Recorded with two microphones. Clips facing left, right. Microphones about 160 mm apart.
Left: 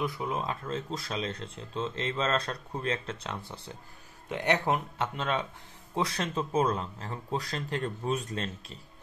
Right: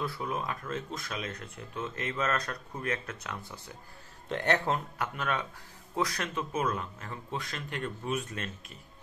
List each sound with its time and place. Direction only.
0.0 s speech: 20° left (ahead or behind)
4.3 s speech: 15° left (ahead or behind); by 8.7 s 30° left (ahead or behind)